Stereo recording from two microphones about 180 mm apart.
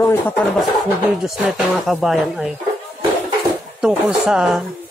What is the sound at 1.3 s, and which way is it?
Speech, centre (ahead or behind).